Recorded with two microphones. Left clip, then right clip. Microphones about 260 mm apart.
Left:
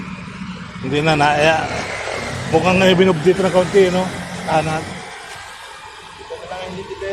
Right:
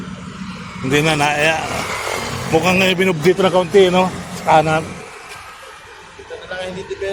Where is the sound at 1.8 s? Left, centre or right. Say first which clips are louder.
Right 2 dB; right.